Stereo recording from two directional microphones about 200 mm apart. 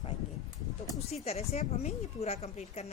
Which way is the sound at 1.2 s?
30° left (ahead or behind).